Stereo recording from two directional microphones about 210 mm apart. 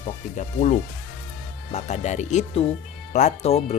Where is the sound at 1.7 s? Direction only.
35° left (ahead or behind).